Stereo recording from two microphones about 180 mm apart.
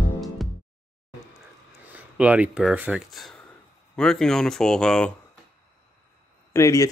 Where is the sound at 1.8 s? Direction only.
10° right (ahead or behind).